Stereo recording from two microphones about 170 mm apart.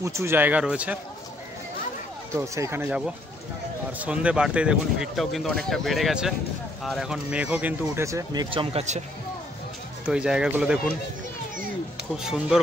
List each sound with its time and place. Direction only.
0.0 s speech: 15° right (ahead or behind)
2.4 s speech: 20° right (ahead or behind)
4.0 s speech: 5° right (ahead or behind); by 9.0 s 40° right (ahead or behind)
10.0 s speech: 5° right (ahead or behind)
12.2 s speech: 5° right (ahead or behind)